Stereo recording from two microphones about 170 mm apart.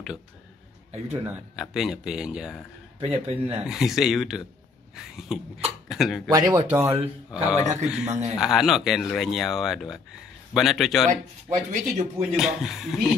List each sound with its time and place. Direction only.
1.6 s speech: centre (ahead or behind)
3.0 s speech: 35° right (ahead or behind)
3.6 s speech: centre (ahead or behind)
6.3 s speech: 15° right (ahead or behind)
7.6 s a man's voice: 45° right (ahead or behind)
8.4 s speech: centre (ahead or behind)
11.4 s speech: 15° right (ahead or behind)
12.4 s speech: centre (ahead or behind)